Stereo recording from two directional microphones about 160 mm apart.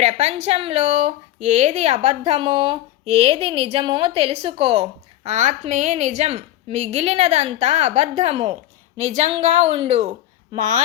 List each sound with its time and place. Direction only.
0.0 s a woman's voice: 45° right (ahead or behind)